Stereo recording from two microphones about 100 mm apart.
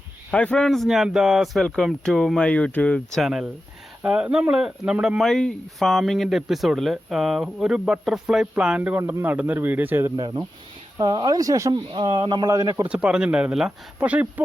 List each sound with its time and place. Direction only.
0.3 s speech: 10° left (ahead or behind)
3.2 s speech: 5° right (ahead or behind); by 10.1 s 20° right (ahead or behind)
10.2 s speech: 40° right (ahead or behind)
11.7 s speech: 55° right (ahead or behind); by 12.7 s 40° right (ahead or behind)
12.9 s speech: 10° right (ahead or behind)